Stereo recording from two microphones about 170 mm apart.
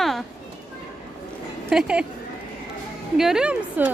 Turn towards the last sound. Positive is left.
turn(degrees=-5)  # may be behind; listen again after turning